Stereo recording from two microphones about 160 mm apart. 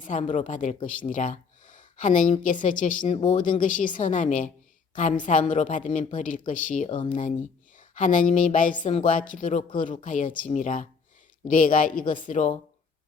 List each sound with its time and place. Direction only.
0.1 s speech: 50° left (ahead or behind)
3.1 s speech: 45° left (ahead or behind)
8.7 s a man's voice: 35° left (ahead or behind); by 12.5 s 50° left (ahead or behind)